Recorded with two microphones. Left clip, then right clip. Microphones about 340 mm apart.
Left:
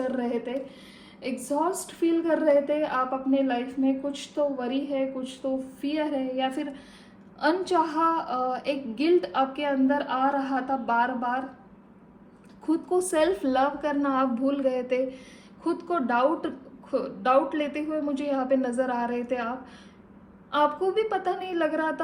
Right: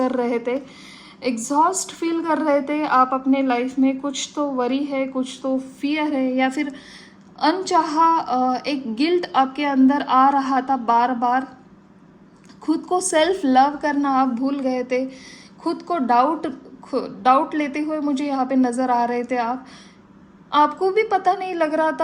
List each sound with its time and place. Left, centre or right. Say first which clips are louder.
0.1 s a woman's voice: right 7 dB; right
13.0 s a woman's voice: right 6 dB; centre
20.8 s a woman's voice: right 8 dB; centre